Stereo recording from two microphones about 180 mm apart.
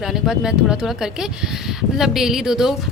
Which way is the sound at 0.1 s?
5° right (ahead or behind).